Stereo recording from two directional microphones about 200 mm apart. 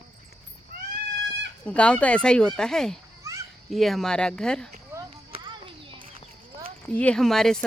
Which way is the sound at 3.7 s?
Centre (ahead or behind).